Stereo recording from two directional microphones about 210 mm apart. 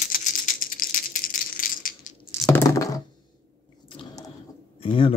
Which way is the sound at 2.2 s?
15° left (ahead or behind).